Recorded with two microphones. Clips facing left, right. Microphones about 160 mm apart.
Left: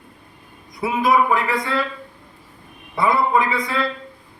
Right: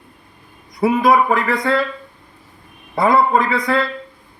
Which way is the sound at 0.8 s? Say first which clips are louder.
Right 4 dB; 55° right (ahead or behind).